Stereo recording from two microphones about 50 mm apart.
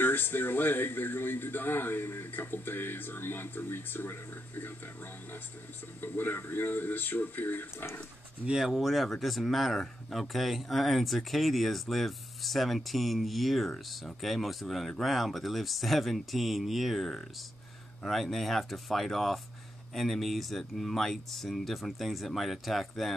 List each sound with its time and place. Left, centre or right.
0.0 s speech: left
8.5 s speech: centre